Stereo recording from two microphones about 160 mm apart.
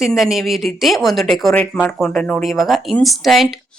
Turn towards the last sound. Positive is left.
turn(degrees=0)  # may be behind; listen again after turning